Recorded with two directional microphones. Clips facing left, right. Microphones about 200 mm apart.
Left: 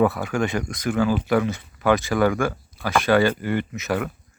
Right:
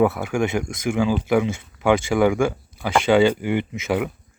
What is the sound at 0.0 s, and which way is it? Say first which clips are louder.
Speech: right 1 dB; 10° right (ahead or behind).